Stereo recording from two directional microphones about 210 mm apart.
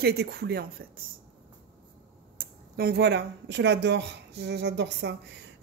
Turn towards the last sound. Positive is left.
turn(degrees=-55)  # may be behind; listen again after turning